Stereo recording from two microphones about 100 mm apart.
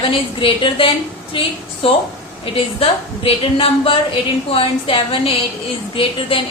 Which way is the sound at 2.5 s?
70° left (ahead or behind).